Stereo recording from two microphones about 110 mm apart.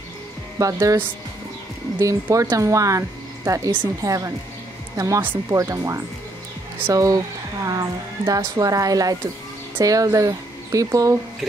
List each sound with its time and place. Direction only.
0.6 s speech: 30° right (ahead or behind)